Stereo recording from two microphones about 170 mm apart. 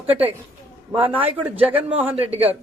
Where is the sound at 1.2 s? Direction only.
35° right (ahead or behind).